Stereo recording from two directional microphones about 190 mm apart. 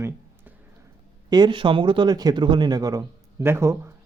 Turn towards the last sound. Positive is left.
turn(degrees=-15)  # may be behind; listen again after turning